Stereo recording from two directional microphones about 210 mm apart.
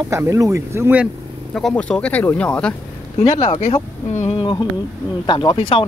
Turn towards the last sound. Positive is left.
turn(degrees=25)  # may be behind; listen again after turning